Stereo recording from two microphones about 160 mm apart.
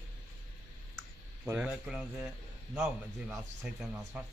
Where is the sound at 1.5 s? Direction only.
10° right (ahead or behind).